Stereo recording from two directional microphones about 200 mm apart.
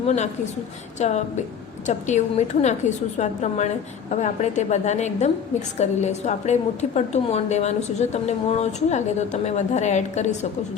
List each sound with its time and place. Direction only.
0.9 s a woman's voice: 35° left (ahead or behind)